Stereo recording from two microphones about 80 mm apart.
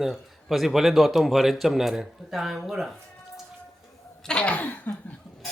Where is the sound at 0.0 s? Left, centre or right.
Centre.